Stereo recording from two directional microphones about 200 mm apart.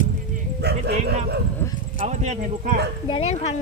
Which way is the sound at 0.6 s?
55° right (ahead or behind).